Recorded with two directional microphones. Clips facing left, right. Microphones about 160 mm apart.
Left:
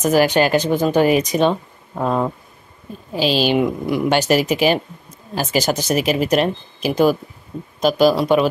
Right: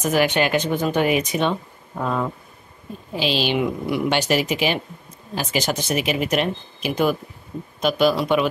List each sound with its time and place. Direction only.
0.1 s a woman's voice: 40° left (ahead or behind)